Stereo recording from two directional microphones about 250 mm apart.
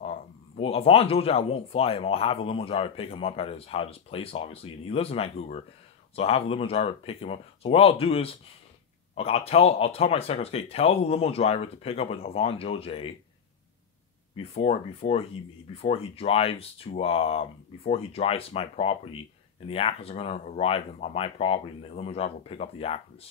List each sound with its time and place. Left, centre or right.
0.6 s speech: left
14.3 s speech: left